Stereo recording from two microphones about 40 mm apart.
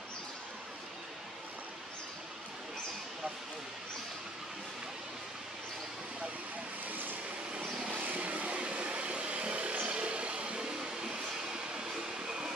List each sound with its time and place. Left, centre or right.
6.9 s vehicle: right; by 12.5 s centre